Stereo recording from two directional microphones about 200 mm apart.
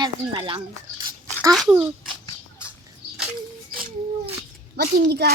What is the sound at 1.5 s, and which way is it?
Speech, centre (ahead or behind).